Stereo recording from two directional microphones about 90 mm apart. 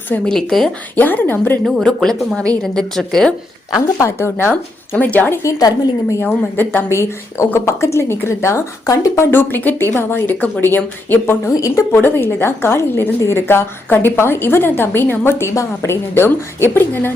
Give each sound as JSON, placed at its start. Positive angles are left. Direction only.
{"t": 0.3, "sound": "speech", "side_deg": 5}
{"t": 0.9, "sound": "a woman's voice", "side_deg": 20}
{"t": 1.6, "sound": "speech", "side_deg": 5}
{"t": 3.9, "sound": "a woman's voice", "side_deg": 30}
{"t": 5.4, "sound": "a woman's voice", "side_deg": 40}
{"t": 6.1, "sound": "a woman's voice", "side_deg": 25}
{"t": 11.4, "sound": "a woman's voice", "side_deg": 35}
{"t": 11.9, "sound": "a woman's voice", "side_deg": 25}